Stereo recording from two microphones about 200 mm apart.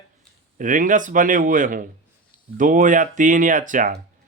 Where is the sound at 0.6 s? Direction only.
40° right (ahead or behind).